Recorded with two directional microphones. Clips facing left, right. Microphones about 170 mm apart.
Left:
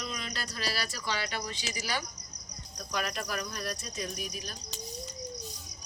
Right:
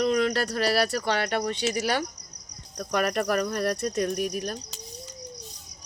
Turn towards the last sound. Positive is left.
turn(degrees=-60)  # may be behind; listen again after turning